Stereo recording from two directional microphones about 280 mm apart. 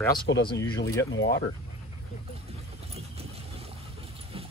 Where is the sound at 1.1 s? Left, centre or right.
Left.